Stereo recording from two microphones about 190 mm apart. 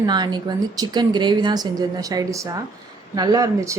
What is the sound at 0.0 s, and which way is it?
Speech, 20° right (ahead or behind).